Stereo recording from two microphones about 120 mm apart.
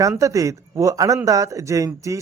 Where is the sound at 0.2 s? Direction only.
25° right (ahead or behind).